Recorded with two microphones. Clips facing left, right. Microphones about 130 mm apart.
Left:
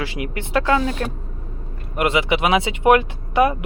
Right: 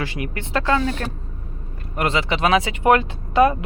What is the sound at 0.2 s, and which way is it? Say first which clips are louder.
Speech: left 5 dB; 10° left (ahead or behind).